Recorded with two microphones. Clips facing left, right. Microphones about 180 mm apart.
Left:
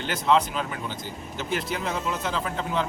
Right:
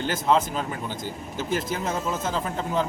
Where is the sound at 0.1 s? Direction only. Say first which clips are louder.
Left 1 dB; 45° right (ahead or behind).